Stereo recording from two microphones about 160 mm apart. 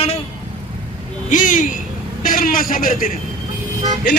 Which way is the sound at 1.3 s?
55° left (ahead or behind).